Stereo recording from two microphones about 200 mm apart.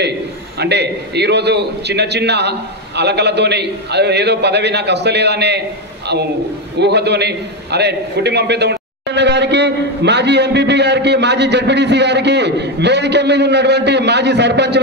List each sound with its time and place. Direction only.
0.6 s a man's voice: 55° right (ahead or behind)
6.8 s a man's voice: 55° right (ahead or behind)